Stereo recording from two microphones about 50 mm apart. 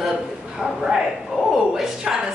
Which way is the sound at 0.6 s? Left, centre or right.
Centre.